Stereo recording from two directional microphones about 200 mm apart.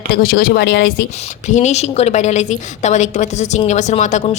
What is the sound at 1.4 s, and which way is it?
Speech, 35° left (ahead or behind).